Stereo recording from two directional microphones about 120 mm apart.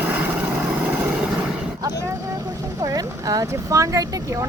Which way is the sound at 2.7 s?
30° right (ahead or behind).